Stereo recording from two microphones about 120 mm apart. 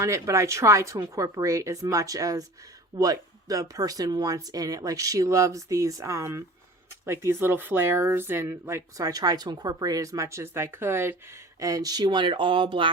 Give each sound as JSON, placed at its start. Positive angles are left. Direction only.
{"t": 0.0, "sound": "speech", "side_deg": -25}